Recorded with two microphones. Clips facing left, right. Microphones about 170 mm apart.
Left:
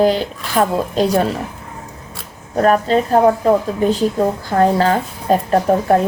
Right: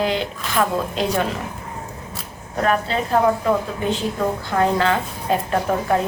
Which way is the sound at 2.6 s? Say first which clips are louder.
Left 7 dB; 40° left (ahead or behind).